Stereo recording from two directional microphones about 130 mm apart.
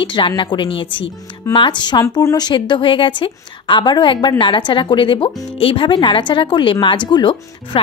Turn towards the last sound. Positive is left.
turn(degrees=40)  # may be behind; listen again after turning